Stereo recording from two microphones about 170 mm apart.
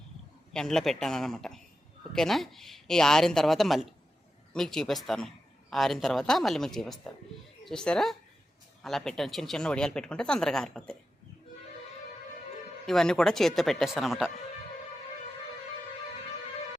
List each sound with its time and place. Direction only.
0.5 s speech: 5° left (ahead or behind)
12.8 s speech: centre (ahead or behind)